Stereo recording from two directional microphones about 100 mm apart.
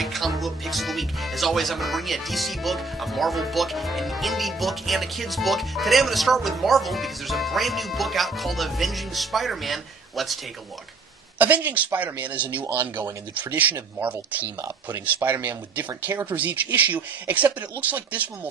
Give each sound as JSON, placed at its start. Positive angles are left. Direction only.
{"t": 0.0, "sound": "speech", "side_deg": 0}
{"t": 11.3, "sound": "speech", "side_deg": -15}